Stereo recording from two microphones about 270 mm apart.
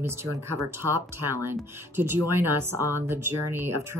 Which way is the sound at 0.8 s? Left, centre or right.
Right.